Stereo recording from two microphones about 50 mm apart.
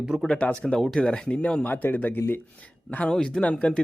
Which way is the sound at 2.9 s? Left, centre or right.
Left.